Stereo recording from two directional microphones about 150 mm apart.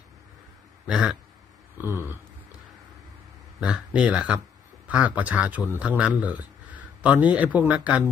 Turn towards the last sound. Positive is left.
turn(degrees=-10)  # may be behind; listen again after turning